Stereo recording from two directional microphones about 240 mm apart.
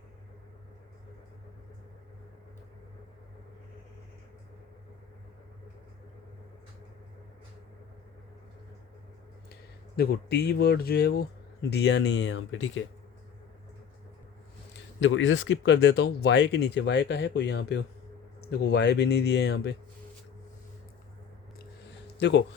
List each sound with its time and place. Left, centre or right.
9.5 s speech: left
15.0 s speech: left
22.2 s speech: left